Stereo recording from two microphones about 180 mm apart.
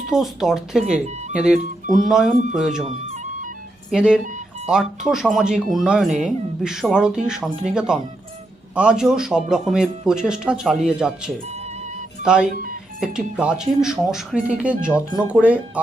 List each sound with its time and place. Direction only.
0.1 s speech: centre (ahead or behind)
0.9 s speech: 40° right (ahead or behind)
1.9 s speech: centre (ahead or behind)
3.9 s speech: 5° right (ahead or behind)
12.2 s speech: 5° right (ahead or behind)
14.8 s speech: 15° left (ahead or behind)
15.3 s speech: 10° right (ahead or behind)